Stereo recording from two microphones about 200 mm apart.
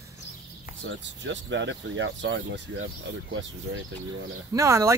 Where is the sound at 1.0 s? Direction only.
65° right (ahead or behind).